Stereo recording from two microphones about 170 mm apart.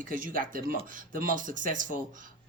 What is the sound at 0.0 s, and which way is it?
Speech, 55° right (ahead or behind).